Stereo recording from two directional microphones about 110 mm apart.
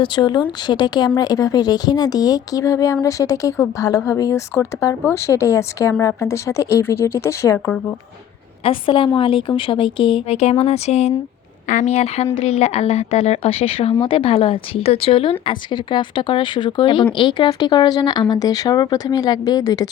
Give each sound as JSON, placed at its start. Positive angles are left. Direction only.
{"t": 0.0, "sound": "a woman's voice", "side_deg": 45}
{"t": 8.6, "sound": "a woman's voice", "side_deg": 55}
{"t": 10.3, "sound": "speech", "side_deg": 75}
{"t": 14.0, "sound": "a woman's voice", "side_deg": 55}